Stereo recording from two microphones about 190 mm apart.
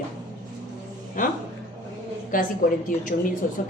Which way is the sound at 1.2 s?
45° left (ahead or behind).